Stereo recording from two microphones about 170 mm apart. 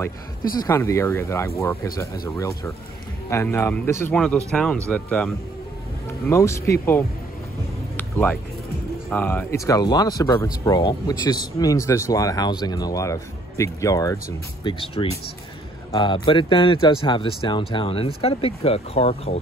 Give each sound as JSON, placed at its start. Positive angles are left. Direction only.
{"t": 0.6, "sound": "speech", "side_deg": 15}
{"t": 6.2, "sound": "speech", "side_deg": 15}
{"t": 7.9, "sound": "music", "side_deg": 10}
{"t": 9.1, "sound": "speech", "side_deg": 10}
{"t": 14.6, "sound": "speech", "side_deg": 30}